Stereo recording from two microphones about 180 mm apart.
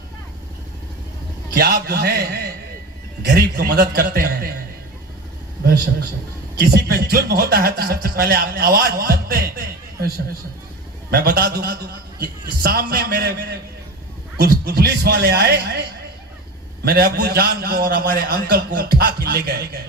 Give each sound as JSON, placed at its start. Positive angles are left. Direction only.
{"t": 1.5, "sound": "a man's voice", "side_deg": -60}
{"t": 6.6, "sound": "a man's voice", "side_deg": -60}
{"t": 11.1, "sound": "a man's voice", "side_deg": -60}
{"t": 16.8, "sound": "a man's voice", "side_deg": -60}